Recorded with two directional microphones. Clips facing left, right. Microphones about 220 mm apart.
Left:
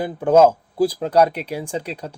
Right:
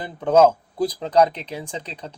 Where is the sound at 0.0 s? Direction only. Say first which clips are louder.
Left 2 dB; 10° left (ahead or behind).